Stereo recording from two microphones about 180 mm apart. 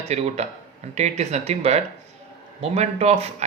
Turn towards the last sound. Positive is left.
turn(degrees=-35)  # may be behind; listen again after turning